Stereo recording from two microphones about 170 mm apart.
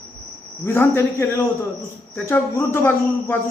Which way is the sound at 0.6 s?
15° left (ahead or behind).